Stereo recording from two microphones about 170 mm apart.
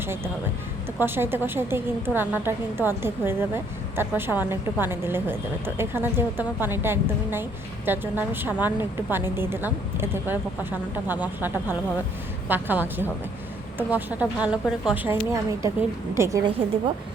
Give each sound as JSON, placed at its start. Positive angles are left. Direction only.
{"t": 0.9, "sound": "a woman's voice", "side_deg": -15}